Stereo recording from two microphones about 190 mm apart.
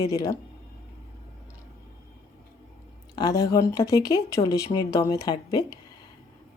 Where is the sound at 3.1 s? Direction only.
20° left (ahead or behind).